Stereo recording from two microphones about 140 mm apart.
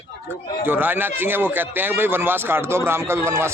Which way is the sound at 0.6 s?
15° right (ahead or behind).